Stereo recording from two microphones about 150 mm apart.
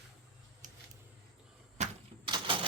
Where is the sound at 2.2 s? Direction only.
35° right (ahead or behind).